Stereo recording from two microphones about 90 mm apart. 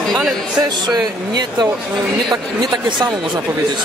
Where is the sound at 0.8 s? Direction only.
50° right (ahead or behind).